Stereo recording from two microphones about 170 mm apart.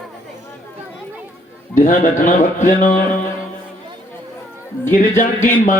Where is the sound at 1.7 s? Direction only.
50° left (ahead or behind).